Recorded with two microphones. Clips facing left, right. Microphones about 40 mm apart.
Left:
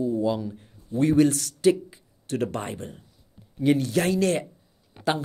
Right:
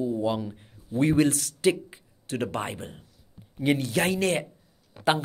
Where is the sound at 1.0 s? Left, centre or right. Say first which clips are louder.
Left 2 dB; right.